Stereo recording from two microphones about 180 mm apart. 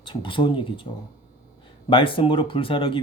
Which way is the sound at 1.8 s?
30° left (ahead or behind).